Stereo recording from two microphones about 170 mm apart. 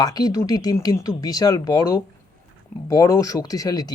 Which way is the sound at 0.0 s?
25° left (ahead or behind).